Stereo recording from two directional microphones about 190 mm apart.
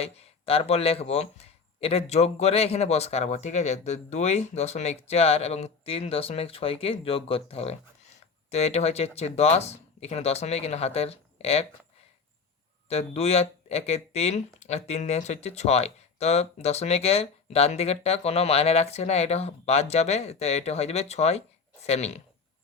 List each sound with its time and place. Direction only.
0.0 s speech: 30° left (ahead or behind)
12.9 s speech: 35° left (ahead or behind)